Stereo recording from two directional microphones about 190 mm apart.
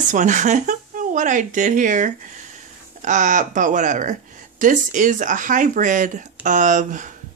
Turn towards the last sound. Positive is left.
turn(degrees=-40)  # may be behind; listen again after turning